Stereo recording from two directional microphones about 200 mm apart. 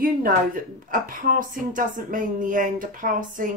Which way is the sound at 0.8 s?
45° right (ahead or behind).